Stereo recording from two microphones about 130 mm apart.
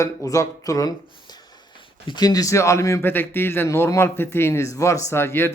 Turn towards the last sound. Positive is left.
turn(degrees=20)  # may be behind; listen again after turning